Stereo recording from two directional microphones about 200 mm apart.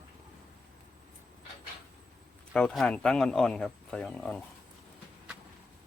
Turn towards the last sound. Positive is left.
turn(degrees=5)  # may be behind; listen again after turning